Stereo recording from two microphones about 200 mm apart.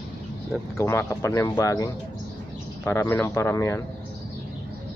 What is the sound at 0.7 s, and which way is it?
Speech, 15° left (ahead or behind).